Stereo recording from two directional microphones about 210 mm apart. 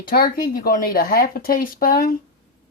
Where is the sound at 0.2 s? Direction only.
40° left (ahead or behind).